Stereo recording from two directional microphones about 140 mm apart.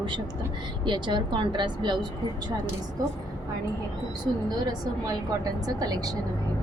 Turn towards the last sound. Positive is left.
turn(degrees=-25)  # may be behind; listen again after turning